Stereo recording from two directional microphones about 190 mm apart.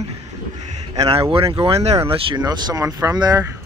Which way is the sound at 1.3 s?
30° right (ahead or behind).